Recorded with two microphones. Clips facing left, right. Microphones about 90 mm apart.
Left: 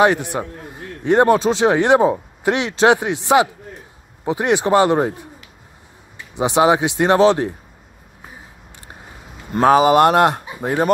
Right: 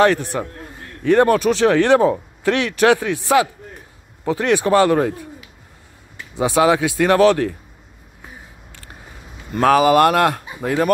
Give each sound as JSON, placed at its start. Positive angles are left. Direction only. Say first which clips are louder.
{"t": 0.0, "sound": "a man's voice", "louder": "even", "side_deg": 15}
{"t": 9.6, "sound": "speech", "louder": "left 1 dB", "side_deg": 25}